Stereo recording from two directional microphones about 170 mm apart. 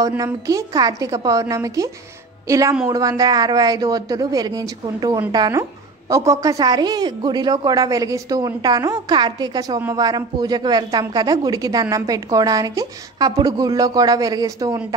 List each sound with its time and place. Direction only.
0.2 s a woman's voice: 20° right (ahead or behind)